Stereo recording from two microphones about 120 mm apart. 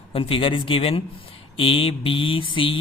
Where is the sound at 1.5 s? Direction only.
50° left (ahead or behind).